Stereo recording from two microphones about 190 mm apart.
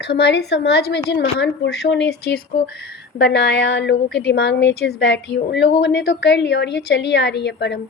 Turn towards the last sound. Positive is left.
turn(degrees=60)  # may be behind; listen again after turning